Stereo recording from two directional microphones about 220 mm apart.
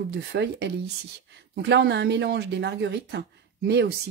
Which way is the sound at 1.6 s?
50° right (ahead or behind).